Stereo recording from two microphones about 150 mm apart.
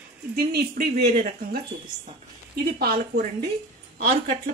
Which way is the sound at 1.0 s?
90° right.